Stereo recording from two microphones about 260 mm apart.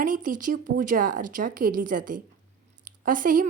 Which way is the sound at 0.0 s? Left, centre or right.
Right.